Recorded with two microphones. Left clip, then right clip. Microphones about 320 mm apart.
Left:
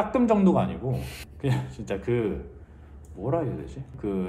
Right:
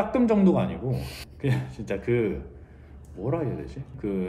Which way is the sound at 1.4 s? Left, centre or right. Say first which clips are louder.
Even; centre.